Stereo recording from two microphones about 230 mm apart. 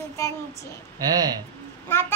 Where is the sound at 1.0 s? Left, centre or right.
Centre.